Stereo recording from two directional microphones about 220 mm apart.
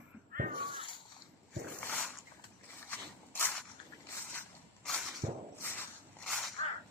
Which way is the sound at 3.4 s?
5° left (ahead or behind).